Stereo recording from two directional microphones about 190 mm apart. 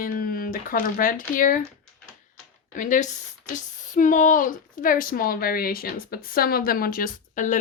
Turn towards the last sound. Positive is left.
turn(degrees=40)  # may be behind; listen again after turning